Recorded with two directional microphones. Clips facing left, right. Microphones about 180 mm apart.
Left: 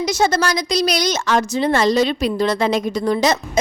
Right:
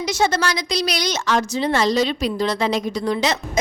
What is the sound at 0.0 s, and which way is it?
A woman's voice, 45° left (ahead or behind).